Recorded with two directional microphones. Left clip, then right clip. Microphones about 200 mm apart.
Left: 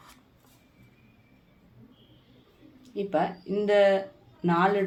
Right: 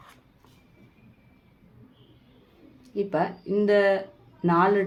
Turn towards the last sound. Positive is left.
turn(degrees=-50)  # may be behind; listen again after turning